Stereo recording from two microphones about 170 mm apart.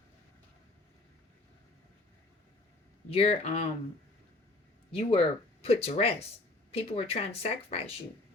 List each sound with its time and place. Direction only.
3.1 s speech: 35° left (ahead or behind)
4.9 s speech: 35° left (ahead or behind)